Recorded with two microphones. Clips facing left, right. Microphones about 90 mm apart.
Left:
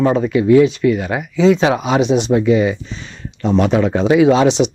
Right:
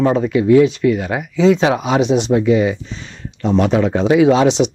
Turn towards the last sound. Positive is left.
turn(degrees=10)  # may be behind; listen again after turning